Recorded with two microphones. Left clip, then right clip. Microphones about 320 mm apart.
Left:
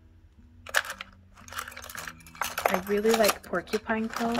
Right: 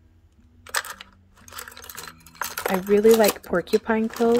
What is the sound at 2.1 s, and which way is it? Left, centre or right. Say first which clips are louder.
Cutlery: right 2 dB; centre.